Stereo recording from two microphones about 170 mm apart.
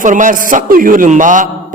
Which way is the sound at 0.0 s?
50° right (ahead or behind).